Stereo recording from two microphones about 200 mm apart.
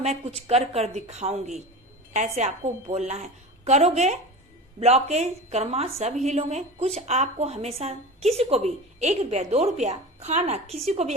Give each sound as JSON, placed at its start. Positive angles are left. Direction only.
{"t": 0.0, "sound": "a woman's voice", "side_deg": -30}